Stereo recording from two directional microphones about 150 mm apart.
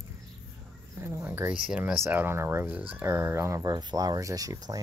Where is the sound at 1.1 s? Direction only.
20° right (ahead or behind).